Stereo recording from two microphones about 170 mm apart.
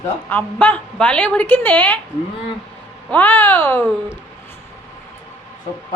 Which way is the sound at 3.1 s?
10° left (ahead or behind).